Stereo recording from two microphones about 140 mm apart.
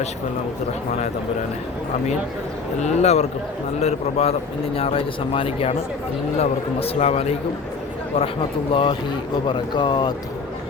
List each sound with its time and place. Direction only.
2.8 s a man's voice: 50° left (ahead or behind)
8.7 s speech: 35° left (ahead or behind)